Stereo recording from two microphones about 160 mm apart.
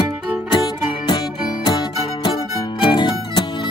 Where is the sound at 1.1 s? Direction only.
25° left (ahead or behind).